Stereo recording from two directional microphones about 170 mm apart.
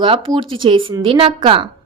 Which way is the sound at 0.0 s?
30° right (ahead or behind).